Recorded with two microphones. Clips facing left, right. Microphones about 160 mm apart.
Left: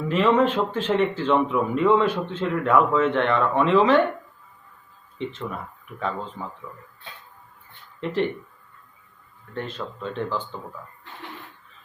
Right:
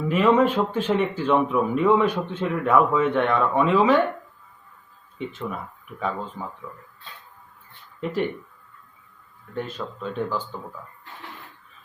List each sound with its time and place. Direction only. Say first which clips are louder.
0.1 s speech: right 1 dB; 10° right (ahead or behind)
5.1 s speech: even; 10° right (ahead or behind)
8.0 s speech: left 1 dB; 10° right (ahead or behind)
9.6 s speech: right 1 dB; 10° right (ahead or behind)